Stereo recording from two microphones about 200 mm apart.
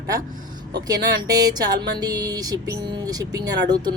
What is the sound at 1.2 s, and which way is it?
Speech, 20° right (ahead or behind).